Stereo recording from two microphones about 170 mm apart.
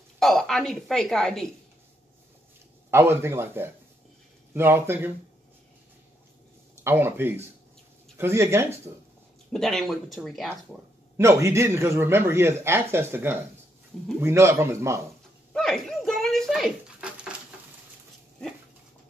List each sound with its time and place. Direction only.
0.2 s a woman's voice: centre (ahead or behind)
2.9 s a man's voice: 15° right (ahead or behind)
6.7 s a man's voice: 15° right (ahead or behind)
9.5 s speech: 5° left (ahead or behind)
11.1 s a man's voice: 15° right (ahead or behind)
15.5 s a sound: centre (ahead or behind)